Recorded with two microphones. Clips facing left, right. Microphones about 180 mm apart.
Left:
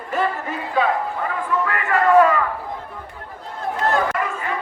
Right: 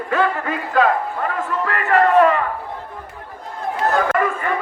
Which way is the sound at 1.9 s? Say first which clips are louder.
Right 1 dB; 65° right (ahead or behind).